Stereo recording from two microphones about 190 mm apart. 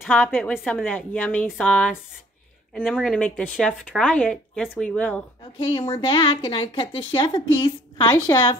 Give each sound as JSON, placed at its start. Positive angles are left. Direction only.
{"t": 0.0, "sound": "a woman's voice", "side_deg": 10}
{"t": 5.6, "sound": "a woman's voice", "side_deg": 25}